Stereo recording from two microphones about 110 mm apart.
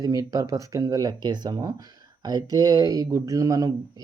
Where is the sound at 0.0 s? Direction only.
30° right (ahead or behind).